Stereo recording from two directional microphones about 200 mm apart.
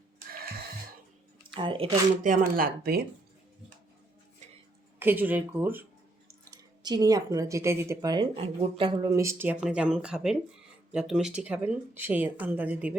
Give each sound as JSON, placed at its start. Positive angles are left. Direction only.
{"t": 1.5, "sound": "speech", "side_deg": -25}
{"t": 2.2, "sound": "speech", "side_deg": -45}
{"t": 4.9, "sound": "speech", "side_deg": -10}